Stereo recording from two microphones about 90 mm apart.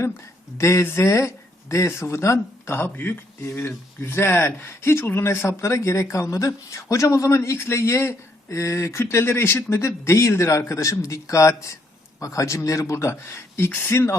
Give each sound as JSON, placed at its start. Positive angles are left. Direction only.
{"t": 0.6, "sound": "speech", "side_deg": 30}